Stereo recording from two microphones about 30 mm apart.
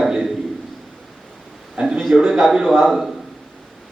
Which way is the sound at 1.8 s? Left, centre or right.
Right.